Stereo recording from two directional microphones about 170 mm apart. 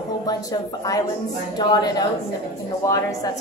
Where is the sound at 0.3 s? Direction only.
20° left (ahead or behind).